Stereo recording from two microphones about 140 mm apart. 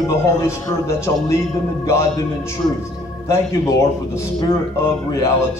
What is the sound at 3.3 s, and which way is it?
Speech, 20° left (ahead or behind).